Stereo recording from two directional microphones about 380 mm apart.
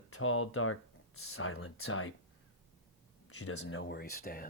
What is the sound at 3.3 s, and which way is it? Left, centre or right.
Speech, left.